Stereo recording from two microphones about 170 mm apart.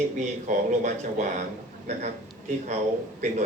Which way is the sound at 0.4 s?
45° right (ahead or behind).